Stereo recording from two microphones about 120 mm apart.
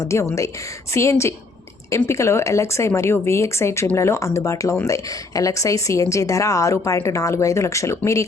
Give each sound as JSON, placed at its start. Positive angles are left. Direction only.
{"t": 0.0, "sound": "a woman's voice", "side_deg": 25}